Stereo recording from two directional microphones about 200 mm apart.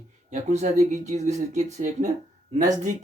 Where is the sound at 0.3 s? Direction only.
35° right (ahead or behind).